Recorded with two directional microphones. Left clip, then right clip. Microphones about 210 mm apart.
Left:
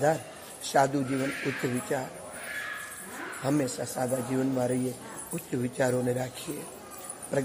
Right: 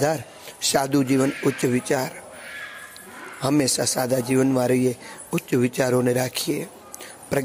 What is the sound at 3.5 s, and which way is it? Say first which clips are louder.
A man's voice: right 11 dB; 30° right (ahead or behind).